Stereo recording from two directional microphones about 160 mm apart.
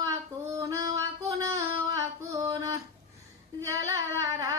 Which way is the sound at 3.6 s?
20° right (ahead or behind).